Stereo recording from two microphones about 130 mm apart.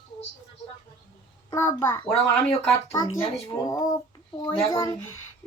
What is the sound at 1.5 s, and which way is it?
Speech, 20° left (ahead or behind).